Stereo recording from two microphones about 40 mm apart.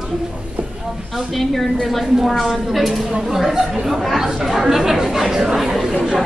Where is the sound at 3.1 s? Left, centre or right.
Centre.